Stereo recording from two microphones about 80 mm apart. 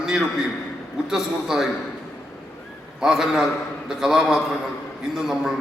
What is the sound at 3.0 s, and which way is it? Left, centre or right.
A man's voice, centre.